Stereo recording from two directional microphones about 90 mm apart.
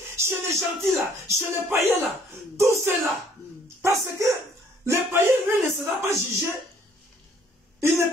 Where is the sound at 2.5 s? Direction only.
25° right (ahead or behind).